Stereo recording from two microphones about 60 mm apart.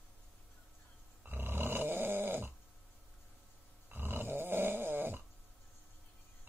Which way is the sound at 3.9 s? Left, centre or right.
Right.